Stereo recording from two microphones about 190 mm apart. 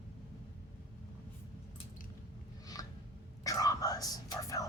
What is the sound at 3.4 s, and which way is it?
Whispering, 20° left (ahead or behind).